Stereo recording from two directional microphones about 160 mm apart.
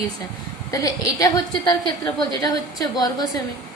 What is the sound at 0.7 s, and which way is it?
A woman's voice, 25° left (ahead or behind).